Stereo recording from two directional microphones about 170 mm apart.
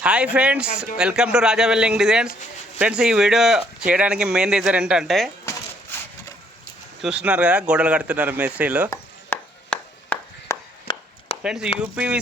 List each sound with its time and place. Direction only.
0.0 s speech: 5° right (ahead or behind)
7.0 s speech: 5° right (ahead or behind)
8.9 s a sound: 10° left (ahead or behind)
10.9 s chop: 30° left (ahead or behind)
11.4 s speech: 5° right (ahead or behind)